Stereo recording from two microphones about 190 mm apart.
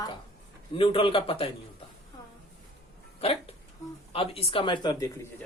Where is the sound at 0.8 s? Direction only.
30° left (ahead or behind).